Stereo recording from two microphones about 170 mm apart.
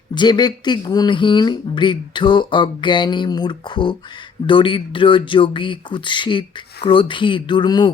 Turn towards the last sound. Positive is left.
turn(degrees=25)  # may be behind; listen again after turning